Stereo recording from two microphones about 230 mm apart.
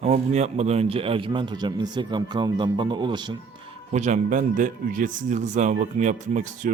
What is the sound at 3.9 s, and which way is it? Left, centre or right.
Speech, right.